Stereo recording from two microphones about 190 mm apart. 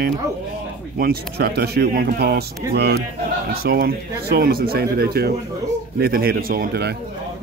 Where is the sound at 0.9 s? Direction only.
55° right (ahead or behind).